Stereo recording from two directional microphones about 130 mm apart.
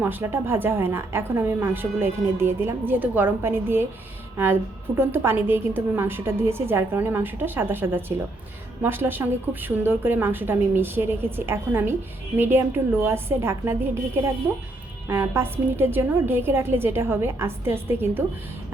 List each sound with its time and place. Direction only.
0.0 s a woman's voice: 15° right (ahead or behind)